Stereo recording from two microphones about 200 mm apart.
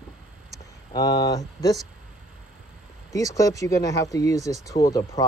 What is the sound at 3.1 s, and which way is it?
Speech, 15° left (ahead or behind).